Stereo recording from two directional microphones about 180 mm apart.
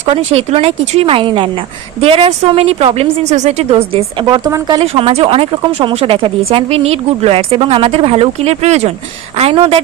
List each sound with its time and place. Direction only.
0.0 s speech: 35° right (ahead or behind)